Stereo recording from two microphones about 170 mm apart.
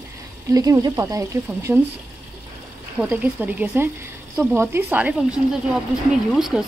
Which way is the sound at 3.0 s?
10° right (ahead or behind).